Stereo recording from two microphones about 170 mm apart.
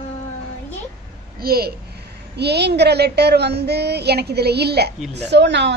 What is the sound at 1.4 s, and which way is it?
Speech, 65° right (ahead or behind).